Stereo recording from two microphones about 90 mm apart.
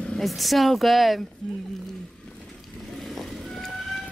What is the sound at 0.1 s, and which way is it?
Speech, centre (ahead or behind).